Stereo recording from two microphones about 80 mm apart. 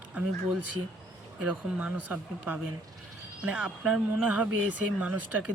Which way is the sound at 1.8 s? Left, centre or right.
Right.